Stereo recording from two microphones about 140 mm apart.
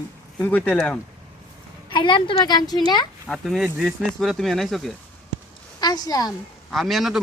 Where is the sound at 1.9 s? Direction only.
35° left (ahead or behind).